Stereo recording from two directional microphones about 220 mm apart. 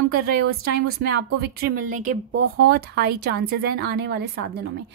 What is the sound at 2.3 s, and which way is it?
Speech, 55° right (ahead or behind).